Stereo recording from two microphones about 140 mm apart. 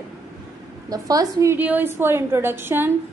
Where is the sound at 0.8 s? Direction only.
25° right (ahead or behind).